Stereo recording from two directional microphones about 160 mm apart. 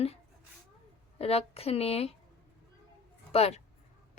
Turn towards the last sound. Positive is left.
turn(degrees=40)  # may be behind; listen again after turning